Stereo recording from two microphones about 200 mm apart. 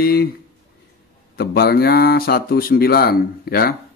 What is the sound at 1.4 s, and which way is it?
Speech, 50° left (ahead or behind).